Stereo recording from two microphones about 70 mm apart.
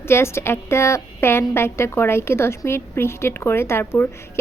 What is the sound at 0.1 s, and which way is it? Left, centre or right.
A woman's voice, left.